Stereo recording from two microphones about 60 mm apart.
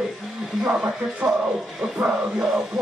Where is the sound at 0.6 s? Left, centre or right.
Centre.